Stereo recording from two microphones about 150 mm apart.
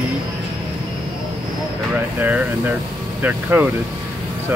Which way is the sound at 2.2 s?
10° right (ahead or behind).